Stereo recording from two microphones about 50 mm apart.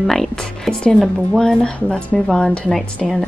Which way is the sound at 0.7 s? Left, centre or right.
Centre.